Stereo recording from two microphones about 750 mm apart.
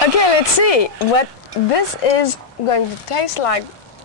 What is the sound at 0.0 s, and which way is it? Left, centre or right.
Speech, left.